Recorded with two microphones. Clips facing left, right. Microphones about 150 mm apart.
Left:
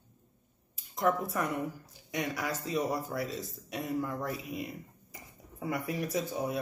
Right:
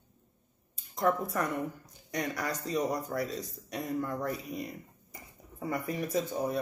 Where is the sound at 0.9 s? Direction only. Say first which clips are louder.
Right 1 dB; centre (ahead or behind).